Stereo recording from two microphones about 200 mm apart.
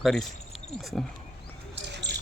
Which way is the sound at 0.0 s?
Centre (ahead or behind).